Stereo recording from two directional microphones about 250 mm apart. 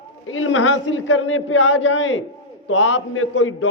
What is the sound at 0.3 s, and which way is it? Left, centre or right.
A man's voice, left.